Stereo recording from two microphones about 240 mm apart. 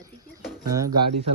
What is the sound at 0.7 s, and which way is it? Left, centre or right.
Speech, centre.